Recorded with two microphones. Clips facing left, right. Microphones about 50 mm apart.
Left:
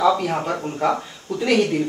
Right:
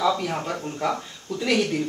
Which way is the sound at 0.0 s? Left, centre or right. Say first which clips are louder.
Left 5 dB; centre.